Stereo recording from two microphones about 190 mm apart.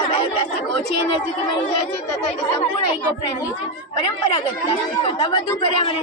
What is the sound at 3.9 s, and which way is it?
Speech, 25° left (ahead or behind).